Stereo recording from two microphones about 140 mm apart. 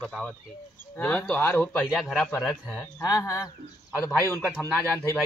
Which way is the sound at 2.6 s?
5° left (ahead or behind).